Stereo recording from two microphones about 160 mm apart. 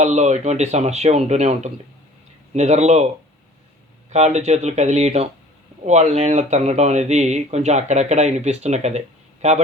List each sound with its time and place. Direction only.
0.0 s speech: 45° right (ahead or behind)
4.1 s speech: 45° right (ahead or behind)